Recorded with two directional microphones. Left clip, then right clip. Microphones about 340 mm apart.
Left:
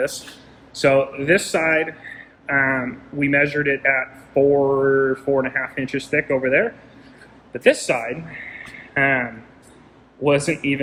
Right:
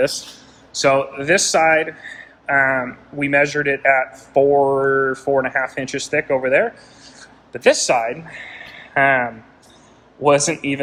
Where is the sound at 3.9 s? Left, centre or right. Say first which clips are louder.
Right 4 dB; centre.